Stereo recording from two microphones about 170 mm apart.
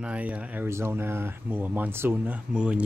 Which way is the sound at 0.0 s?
5° right (ahead or behind).